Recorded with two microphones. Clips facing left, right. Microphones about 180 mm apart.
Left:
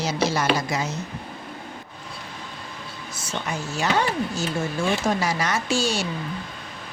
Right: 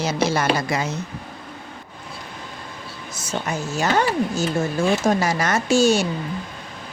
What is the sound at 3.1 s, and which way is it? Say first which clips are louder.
Speech: right 4 dB; 40° right (ahead or behind).